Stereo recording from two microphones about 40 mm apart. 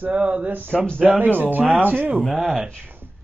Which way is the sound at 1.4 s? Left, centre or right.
Right.